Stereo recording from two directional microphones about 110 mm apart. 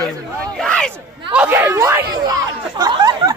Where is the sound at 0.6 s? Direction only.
5° left (ahead or behind).